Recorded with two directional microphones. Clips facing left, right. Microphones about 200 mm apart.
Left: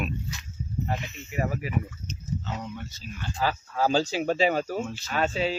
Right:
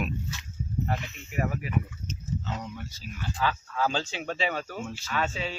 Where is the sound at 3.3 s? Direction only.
40° left (ahead or behind).